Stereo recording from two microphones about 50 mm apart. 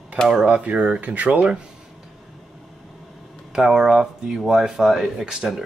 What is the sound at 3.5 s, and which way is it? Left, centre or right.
Speech, centre.